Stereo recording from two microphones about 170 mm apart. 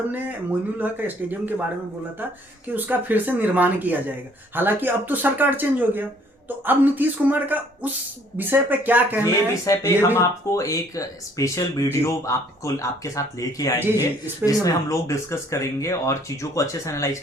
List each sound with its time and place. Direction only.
0.1 s speech: 10° right (ahead or behind)
2.7 s speech: 10° right (ahead or behind)
9.2 s speech: 15° left (ahead or behind)
13.7 s speech: 10° right (ahead or behind)
14.4 s speech: 20° left (ahead or behind)